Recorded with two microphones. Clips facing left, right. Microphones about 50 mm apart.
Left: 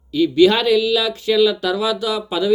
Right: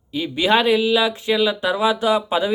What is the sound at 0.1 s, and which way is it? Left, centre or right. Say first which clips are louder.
Speech: left 5 dB; right.